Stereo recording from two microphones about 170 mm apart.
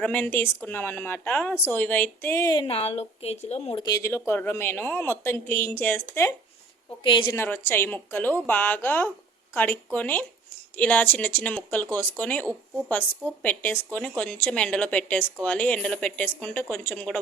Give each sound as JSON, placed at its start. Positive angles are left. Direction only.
{"t": 0.0, "sound": "a woman's voice", "side_deg": 10}
{"t": 3.8, "sound": "a woman's voice", "side_deg": 20}
{"t": 7.0, "sound": "a woman's voice", "side_deg": 30}
{"t": 7.3, "sound": "a woman's voice", "side_deg": 15}